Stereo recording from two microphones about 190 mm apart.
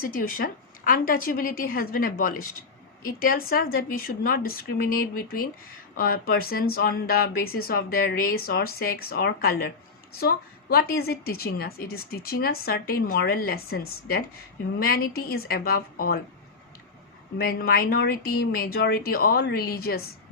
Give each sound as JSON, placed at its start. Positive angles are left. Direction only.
{"t": 0.0, "sound": "a woman's voice", "side_deg": 50}
{"t": 17.3, "sound": "a woman's voice", "side_deg": 55}